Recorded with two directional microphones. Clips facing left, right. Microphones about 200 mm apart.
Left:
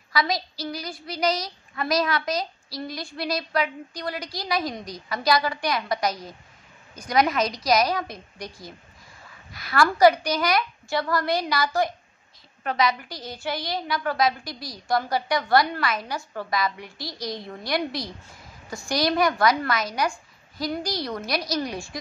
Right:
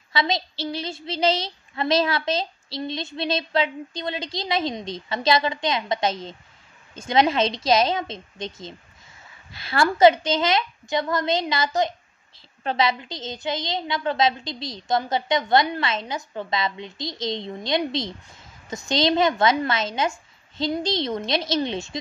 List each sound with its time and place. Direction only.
0.1 s a woman's voice: 25° right (ahead or behind)